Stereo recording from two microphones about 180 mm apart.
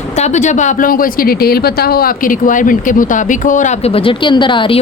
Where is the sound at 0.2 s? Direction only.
40° left (ahead or behind).